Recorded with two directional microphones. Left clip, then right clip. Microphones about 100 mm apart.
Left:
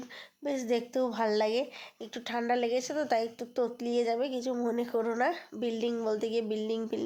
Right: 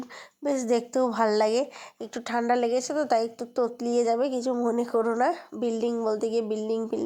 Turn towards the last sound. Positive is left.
turn(degrees=-40)  # may be behind; listen again after turning